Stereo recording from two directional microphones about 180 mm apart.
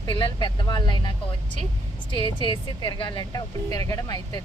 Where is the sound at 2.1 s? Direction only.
30° left (ahead or behind).